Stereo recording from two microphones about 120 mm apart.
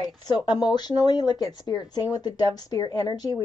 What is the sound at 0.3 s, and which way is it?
Speech, 35° left (ahead or behind).